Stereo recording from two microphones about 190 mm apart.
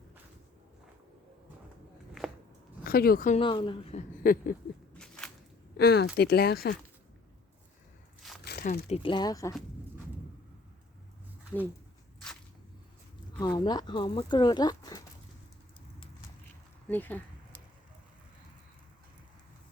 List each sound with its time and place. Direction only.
2.2 s biting: centre (ahead or behind)
2.8 s speech: 50° left (ahead or behind)
3.4 s speech: 25° left (ahead or behind)
4.2 s a sound: 50° left (ahead or behind)
4.9 s a sound: 5° left (ahead or behind)
5.7 s speech: 55° left (ahead or behind)
8.4 s a sound: 55° left (ahead or behind)
8.9 s speech: 25° left (ahead or behind)
13.4 s speech: 20° left (ahead or behind)
16.9 s speech: 10° left (ahead or behind)